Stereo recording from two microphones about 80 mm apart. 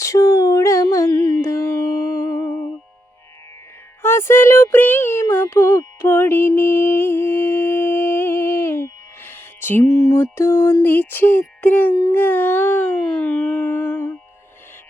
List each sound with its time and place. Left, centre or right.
0.0 s a sound: left
1.4 s music: left
4.0 s speech: left
5.3 s music: left
6.6 s mantra: left
9.8 s music: left; by 11.9 s centre
12.1 s a sound: left